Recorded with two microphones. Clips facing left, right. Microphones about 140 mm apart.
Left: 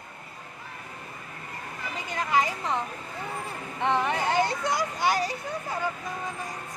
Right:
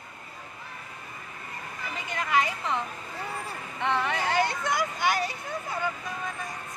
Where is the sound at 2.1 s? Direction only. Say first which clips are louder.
Left 1 dB; 35° left (ahead or behind).